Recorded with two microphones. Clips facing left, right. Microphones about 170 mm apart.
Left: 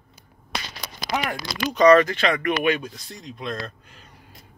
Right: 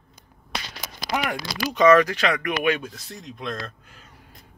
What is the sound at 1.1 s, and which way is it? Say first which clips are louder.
Speech: even; 5° right (ahead or behind).